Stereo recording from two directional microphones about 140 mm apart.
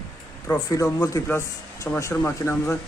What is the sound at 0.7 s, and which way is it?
Speech, 25° left (ahead or behind).